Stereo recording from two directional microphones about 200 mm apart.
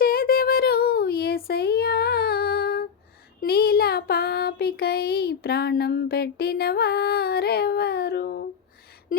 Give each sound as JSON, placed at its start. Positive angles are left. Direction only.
{"t": 0.0, "sound": "child singing", "side_deg": 50}
{"t": 1.5, "sound": "female singing", "side_deg": 50}
{"t": 3.4, "sound": "a sound", "side_deg": 50}